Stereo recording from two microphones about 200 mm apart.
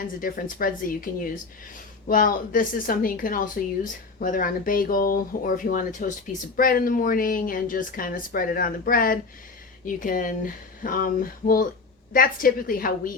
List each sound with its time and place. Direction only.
0.2 s a woman's voice: 45° left (ahead or behind)